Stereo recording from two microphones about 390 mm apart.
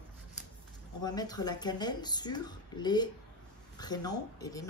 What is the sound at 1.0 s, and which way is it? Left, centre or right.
Speech, centre.